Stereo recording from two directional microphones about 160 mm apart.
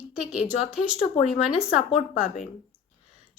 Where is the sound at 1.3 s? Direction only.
5° right (ahead or behind).